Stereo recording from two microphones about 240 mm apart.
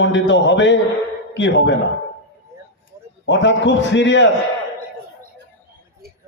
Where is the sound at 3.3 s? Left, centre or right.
Left.